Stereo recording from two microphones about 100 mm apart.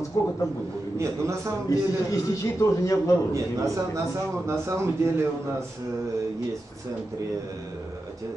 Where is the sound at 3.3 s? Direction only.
30° right (ahead or behind).